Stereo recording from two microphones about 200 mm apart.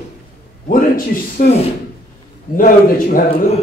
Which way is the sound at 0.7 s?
45° left (ahead or behind).